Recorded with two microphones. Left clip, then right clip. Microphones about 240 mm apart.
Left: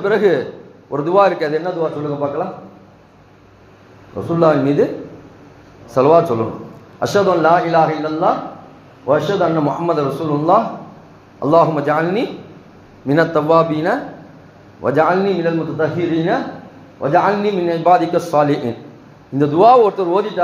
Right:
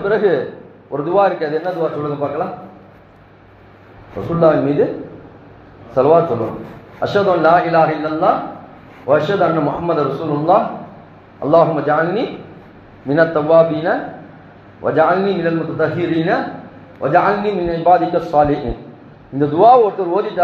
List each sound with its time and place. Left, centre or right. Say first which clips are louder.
0.0 s a man's voice: left 1 dB; left
4.4 s a man's voice: even; left
5.9 s a man's voice: even; left